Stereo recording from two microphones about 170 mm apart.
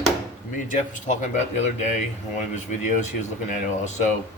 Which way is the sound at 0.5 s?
50° left (ahead or behind).